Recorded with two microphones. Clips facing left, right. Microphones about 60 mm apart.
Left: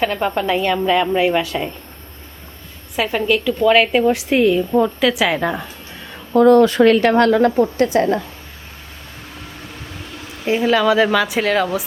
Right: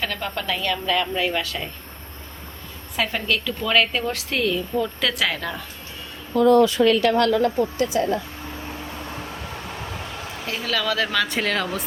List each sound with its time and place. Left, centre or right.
0.0 s a woman's voice: left
2.9 s a woman's voice: centre
4.9 s a woman's voice: centre
6.3 s speech: left
10.4 s a woman's voice: left; by 11.9 s centre